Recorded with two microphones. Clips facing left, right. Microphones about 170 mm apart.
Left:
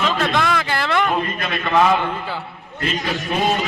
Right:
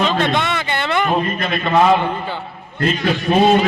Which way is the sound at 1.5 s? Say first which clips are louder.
Right 2 dB; 20° right (ahead or behind).